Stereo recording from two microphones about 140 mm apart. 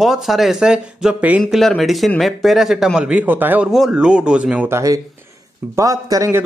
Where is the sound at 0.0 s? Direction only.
Centre (ahead or behind).